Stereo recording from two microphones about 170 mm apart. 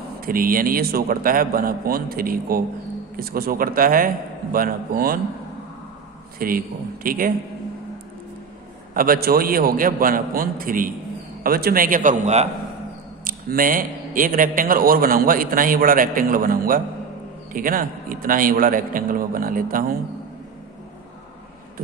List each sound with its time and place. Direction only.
0.2 s a man's voice: 55° right (ahead or behind)
6.4 s a man's voice: 55° right (ahead or behind)
8.9 s a man's voice: 60° right (ahead or behind)
13.2 s a man's voice: 55° right (ahead or behind)